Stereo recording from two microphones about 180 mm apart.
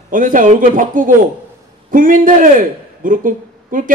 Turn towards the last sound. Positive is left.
turn(degrees=-50)  # may be behind; listen again after turning